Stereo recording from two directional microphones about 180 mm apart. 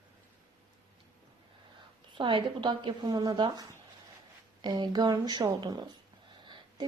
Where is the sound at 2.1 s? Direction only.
25° right (ahead or behind).